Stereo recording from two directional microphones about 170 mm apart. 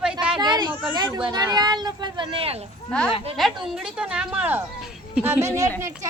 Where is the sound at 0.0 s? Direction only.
5° right (ahead or behind).